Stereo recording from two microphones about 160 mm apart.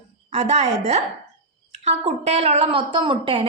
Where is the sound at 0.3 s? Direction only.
40° right (ahead or behind).